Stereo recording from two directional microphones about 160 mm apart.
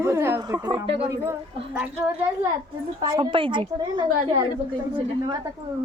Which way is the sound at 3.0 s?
30° right (ahead or behind).